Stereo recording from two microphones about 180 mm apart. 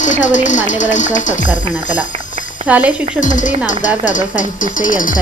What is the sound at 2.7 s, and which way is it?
Speech, 10° right (ahead or behind).